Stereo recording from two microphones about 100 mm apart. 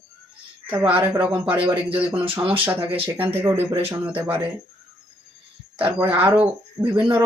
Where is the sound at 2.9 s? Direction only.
70° right (ahead or behind).